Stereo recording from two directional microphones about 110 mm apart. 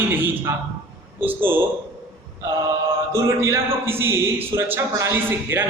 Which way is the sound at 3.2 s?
25° right (ahead or behind).